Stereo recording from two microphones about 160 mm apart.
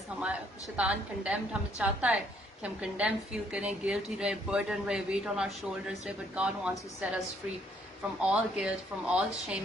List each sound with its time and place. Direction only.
0.2 s a man's voice: 5° right (ahead or behind)
8.3 s a man's voice: 5° right (ahead or behind)